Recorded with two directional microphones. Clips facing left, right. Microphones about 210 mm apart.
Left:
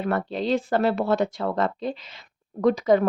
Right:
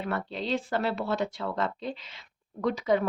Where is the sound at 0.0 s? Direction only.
45° left (ahead or behind).